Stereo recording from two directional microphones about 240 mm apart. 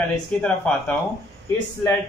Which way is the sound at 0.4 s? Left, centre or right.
Centre.